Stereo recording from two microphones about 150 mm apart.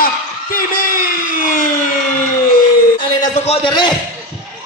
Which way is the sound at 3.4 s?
40° left (ahead or behind).